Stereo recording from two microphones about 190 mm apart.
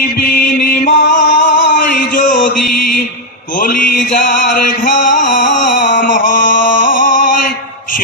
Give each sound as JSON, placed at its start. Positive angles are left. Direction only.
{"t": 0.2, "sound": "music", "side_deg": 50}
{"t": 2.1, "sound": "mantra", "side_deg": 45}
{"t": 5.2, "sound": "a sound", "side_deg": 40}